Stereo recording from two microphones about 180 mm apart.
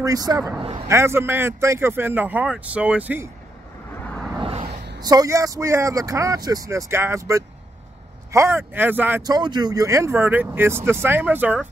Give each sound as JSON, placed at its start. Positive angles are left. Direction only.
{"t": 0.0, "sound": "speech", "side_deg": -20}
{"t": 0.8, "sound": "speech", "side_deg": -15}
{"t": 4.1, "sound": "vehicle", "side_deg": 0}
{"t": 4.4, "sound": "a sound", "side_deg": -30}
{"t": 5.0, "sound": "speech", "side_deg": -20}
{"t": 9.2, "sound": "speech", "side_deg": -20}